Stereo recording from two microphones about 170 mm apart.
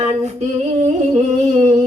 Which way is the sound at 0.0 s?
40° right (ahead or behind).